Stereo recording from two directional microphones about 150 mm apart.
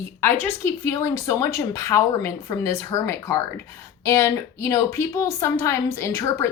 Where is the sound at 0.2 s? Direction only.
15° left (ahead or behind).